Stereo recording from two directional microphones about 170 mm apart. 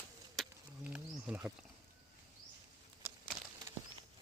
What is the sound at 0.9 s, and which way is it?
Wild animals, 5° right (ahead or behind).